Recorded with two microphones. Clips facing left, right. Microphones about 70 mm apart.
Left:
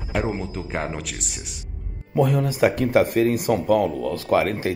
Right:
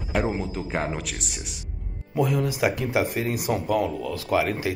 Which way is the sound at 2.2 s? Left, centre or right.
Left.